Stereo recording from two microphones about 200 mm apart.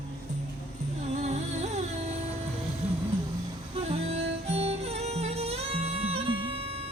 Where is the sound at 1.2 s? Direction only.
35° right (ahead or behind).